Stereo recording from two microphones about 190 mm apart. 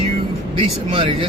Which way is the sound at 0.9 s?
30° right (ahead or behind).